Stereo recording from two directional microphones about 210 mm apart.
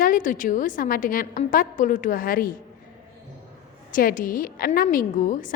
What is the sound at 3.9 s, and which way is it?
A woman's voice, 40° left (ahead or behind).